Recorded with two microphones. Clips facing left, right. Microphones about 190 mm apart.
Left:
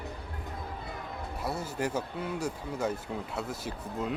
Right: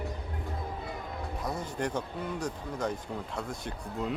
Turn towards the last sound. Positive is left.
turn(degrees=0)  # may be behind; listen again after turning